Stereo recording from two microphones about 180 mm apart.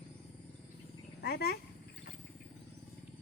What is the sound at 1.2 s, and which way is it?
Speech, 60° left (ahead or behind).